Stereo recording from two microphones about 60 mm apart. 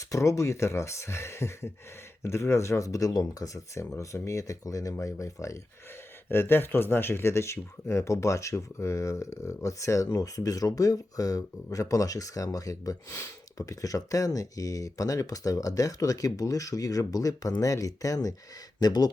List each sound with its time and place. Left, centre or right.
0.0 s speech: left
6.2 s speech: left